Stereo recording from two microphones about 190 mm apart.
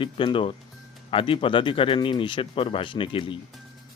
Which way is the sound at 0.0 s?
25° left (ahead or behind).